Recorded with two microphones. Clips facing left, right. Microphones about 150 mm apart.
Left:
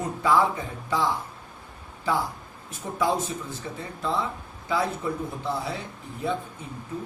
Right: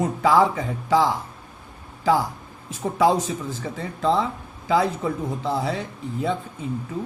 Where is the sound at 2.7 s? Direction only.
90° right.